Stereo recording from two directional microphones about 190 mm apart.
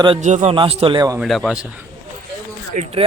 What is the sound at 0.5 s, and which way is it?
Speech, 30° right (ahead or behind).